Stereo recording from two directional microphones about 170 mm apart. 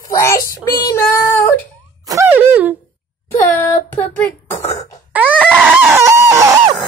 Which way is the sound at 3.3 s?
15° left (ahead or behind).